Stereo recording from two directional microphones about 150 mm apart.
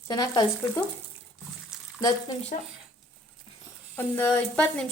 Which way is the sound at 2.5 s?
60° left (ahead or behind).